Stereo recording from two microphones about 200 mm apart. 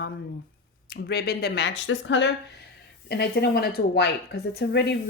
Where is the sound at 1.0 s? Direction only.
50° left (ahead or behind).